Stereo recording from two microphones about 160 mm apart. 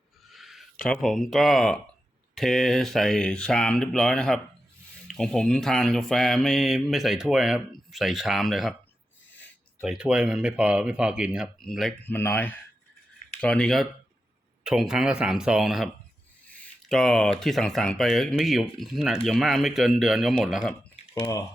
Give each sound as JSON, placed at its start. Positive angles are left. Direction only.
{"t": 0.3, "sound": "a sound", "side_deg": 0}
{"t": 0.9, "sound": "mantra", "side_deg": 0}
{"t": 9.8, "sound": "mantra", "side_deg": -5}
{"t": 12.0, "sound": "speech", "side_deg": 15}
{"t": 13.4, "sound": "mantra", "side_deg": 5}
{"t": 16.5, "sound": "speech", "side_deg": 5}
{"t": 18.8, "sound": "mantra", "side_deg": 0}
{"t": 20.9, "sound": "typing", "side_deg": 30}